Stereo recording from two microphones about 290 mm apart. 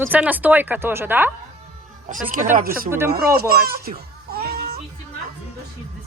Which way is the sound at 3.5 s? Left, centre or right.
Right.